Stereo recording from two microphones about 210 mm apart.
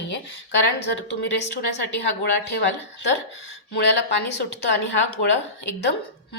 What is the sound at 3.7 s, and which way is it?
Speech, 50° left (ahead or behind).